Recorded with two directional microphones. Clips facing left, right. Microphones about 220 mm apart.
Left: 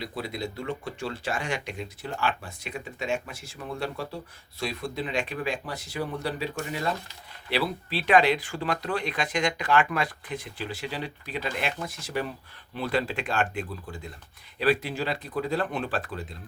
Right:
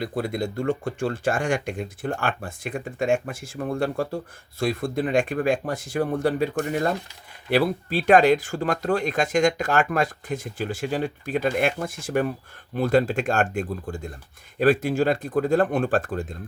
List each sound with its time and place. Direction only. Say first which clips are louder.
0.0 s speech: right 7 dB; 50° right (ahead or behind)